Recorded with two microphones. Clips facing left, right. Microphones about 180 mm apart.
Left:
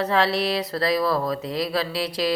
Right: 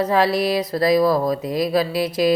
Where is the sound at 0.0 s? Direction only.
15° right (ahead or behind).